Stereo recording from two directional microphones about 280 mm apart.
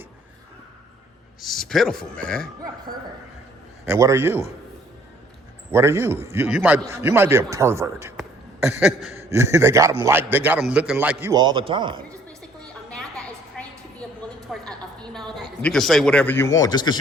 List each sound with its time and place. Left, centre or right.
1.4 s speech: centre
3.8 s a man's voice: centre
5.7 s a man's voice: centre
8.8 s a sound: centre
9.3 s a man's voice: centre
12.9 s a sound: centre
14.5 s a woman's voice: centre